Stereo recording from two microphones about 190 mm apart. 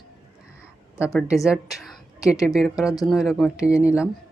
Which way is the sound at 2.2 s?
15° left (ahead or behind).